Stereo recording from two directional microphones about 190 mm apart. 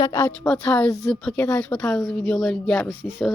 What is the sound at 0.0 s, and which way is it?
Speech, 20° left (ahead or behind).